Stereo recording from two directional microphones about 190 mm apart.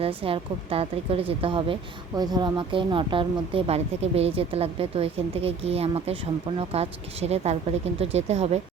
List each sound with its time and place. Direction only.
0.2 s speech: 30° right (ahead or behind)